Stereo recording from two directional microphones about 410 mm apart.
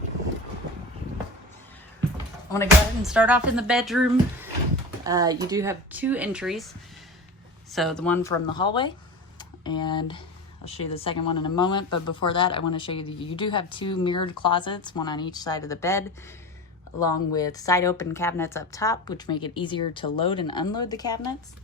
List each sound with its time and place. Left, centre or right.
2.5 s speech: centre
7.7 s speech: centre
9.4 s a sound: centre
10.7 s a woman's voice: centre
11.2 s speech: left
11.5 s a woman's voice: centre